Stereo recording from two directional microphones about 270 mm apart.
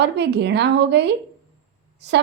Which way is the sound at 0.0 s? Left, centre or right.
Right.